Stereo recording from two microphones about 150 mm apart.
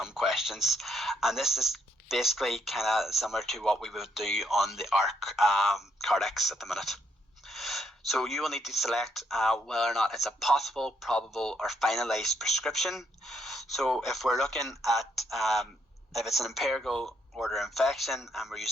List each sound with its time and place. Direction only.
0.0 s speech: 5° right (ahead or behind)